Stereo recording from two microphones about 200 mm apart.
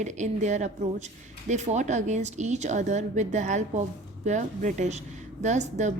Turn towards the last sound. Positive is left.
turn(degrees=-35)  # may be behind; listen again after turning